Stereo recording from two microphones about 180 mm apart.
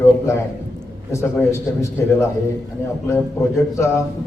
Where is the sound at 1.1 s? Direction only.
15° left (ahead or behind).